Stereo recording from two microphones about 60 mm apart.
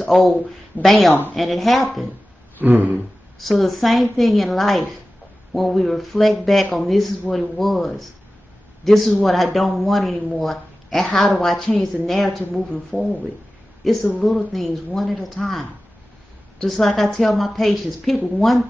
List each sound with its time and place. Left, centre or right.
0.1 s speech: centre
2.6 s a sound: right
3.4 s speech: centre
16.8 s speech: centre